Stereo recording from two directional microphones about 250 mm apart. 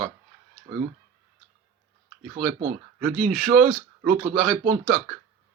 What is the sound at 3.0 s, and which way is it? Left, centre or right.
A man's voice, centre.